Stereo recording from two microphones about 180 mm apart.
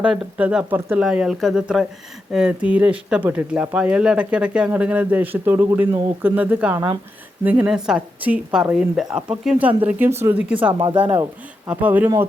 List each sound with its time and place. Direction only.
0.0 s speech: 5° right (ahead or behind)
6.7 s speech: 20° right (ahead or behind)
7.4 s speech: 5° right (ahead or behind)